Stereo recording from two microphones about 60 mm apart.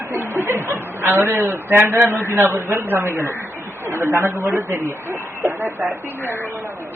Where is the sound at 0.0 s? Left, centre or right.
Right.